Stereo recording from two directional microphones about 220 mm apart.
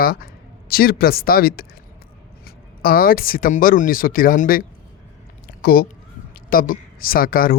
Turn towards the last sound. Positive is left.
turn(degrees=40)  # may be behind; listen again after turning